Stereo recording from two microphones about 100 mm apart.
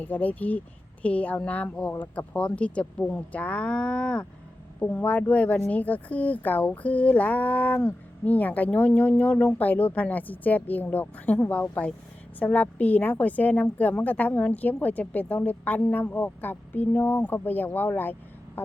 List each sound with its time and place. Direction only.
0.0 s a woman's voice: 15° left (ahead or behind)